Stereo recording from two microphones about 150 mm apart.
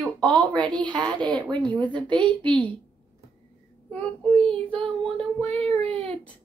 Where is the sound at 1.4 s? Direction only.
30° right (ahead or behind).